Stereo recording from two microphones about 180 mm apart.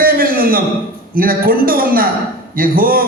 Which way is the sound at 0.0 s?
55° right (ahead or behind).